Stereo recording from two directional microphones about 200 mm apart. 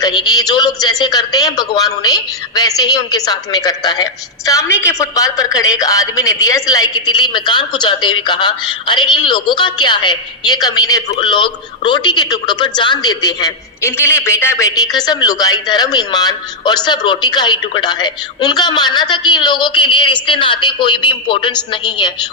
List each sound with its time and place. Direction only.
0.0 s speech: 20° left (ahead or behind)